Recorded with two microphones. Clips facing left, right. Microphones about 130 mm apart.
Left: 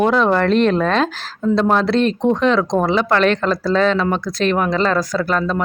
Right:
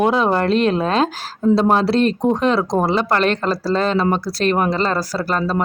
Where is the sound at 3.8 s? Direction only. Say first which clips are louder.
Left 1 dB; 40° right (ahead or behind).